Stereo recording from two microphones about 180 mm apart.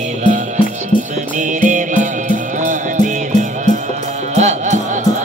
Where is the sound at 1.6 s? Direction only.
45° right (ahead or behind).